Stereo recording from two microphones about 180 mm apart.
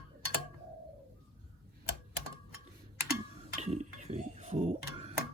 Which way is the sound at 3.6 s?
40° right (ahead or behind).